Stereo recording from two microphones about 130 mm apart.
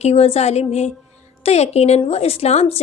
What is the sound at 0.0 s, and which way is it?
A woman's voice, 55° left (ahead or behind).